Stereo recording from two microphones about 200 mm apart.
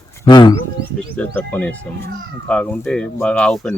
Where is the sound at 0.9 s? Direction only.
5° left (ahead or behind).